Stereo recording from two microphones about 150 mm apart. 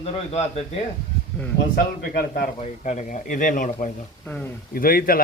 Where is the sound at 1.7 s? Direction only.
90° left.